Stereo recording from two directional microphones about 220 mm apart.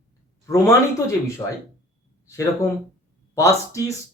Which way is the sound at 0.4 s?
15° left (ahead or behind).